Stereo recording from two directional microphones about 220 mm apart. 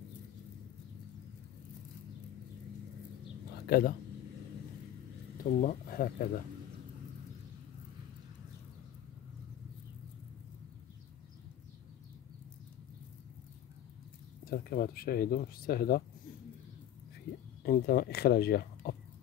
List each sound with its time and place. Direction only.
3.6 s speech: 45° left (ahead or behind)
5.4 s speech: 40° left (ahead or behind)
14.4 s speech: 40° left (ahead or behind)
17.6 s speech: 45° left (ahead or behind)